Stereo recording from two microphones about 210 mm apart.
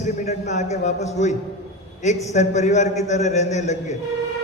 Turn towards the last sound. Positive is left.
turn(degrees=35)  # may be behind; listen again after turning